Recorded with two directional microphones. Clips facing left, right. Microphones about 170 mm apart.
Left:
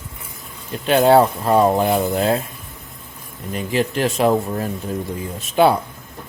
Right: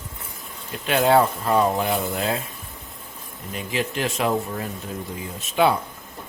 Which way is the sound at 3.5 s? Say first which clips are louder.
Left 6 dB; 40° left (ahead or behind).